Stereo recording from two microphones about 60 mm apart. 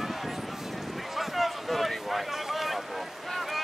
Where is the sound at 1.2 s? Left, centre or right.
Centre.